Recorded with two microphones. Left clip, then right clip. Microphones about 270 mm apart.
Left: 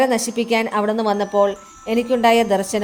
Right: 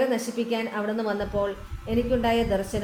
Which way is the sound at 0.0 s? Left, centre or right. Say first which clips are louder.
Left 7 dB; left.